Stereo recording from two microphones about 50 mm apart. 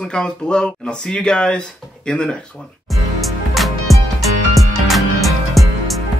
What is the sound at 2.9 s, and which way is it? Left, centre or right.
Music, centre.